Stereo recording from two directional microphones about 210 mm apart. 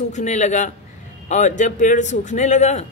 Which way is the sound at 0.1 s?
35° left (ahead or behind).